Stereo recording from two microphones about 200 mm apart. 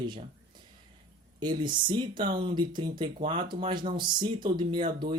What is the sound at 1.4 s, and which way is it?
Speech, 20° right (ahead or behind).